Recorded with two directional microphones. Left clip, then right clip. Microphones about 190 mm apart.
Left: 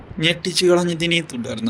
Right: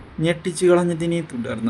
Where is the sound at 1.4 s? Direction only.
5° right (ahead or behind).